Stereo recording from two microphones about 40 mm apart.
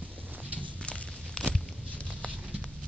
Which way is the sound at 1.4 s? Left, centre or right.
Left.